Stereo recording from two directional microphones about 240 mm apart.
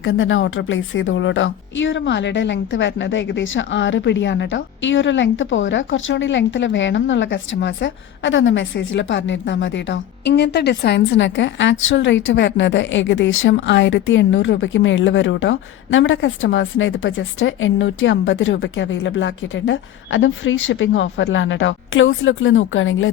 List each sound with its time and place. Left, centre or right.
0.0 s a woman's voice: left